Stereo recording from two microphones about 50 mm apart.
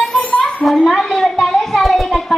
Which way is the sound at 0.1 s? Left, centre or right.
Left.